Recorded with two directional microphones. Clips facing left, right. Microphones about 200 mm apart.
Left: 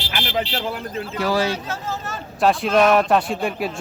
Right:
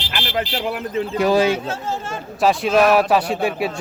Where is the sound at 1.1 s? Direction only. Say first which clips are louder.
Right 5 dB; 20° right (ahead or behind).